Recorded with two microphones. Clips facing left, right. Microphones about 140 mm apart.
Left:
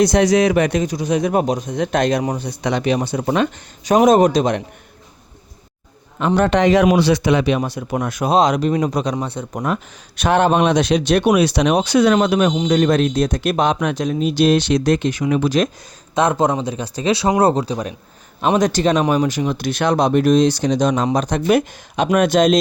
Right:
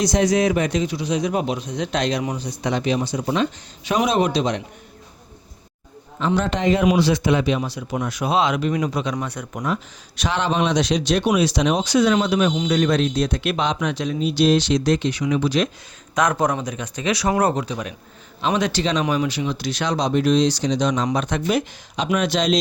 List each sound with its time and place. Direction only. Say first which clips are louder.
0.0 s speech: left 4 dB; 70° left (ahead or behind); by 2.2 s 50° left (ahead or behind)
2.4 s speech: left 3 dB; 65° left (ahead or behind)
3.8 s speech: left 7 dB; 45° left (ahead or behind)
6.1 s speech: left 6 dB; 55° left (ahead or behind); by 6.8 s 80° left
6.8 s speech: left 3 dB; 65° left (ahead or behind); by 9.1 s 40° left (ahead or behind)
9.1 s speech: left 4 dB; 25° left (ahead or behind)
10.2 s speech: left 7 dB; 55° left (ahead or behind)
16.1 s speech: left 3 dB; 25° left (ahead or behind)
21.4 s speech: left 6 dB; 55° left (ahead or behind)